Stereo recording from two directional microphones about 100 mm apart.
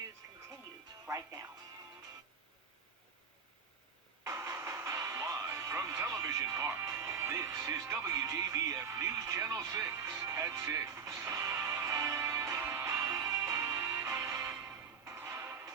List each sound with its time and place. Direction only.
1.0 s speech: 30° right (ahead or behind)
4.2 s music: 30° right (ahead or behind)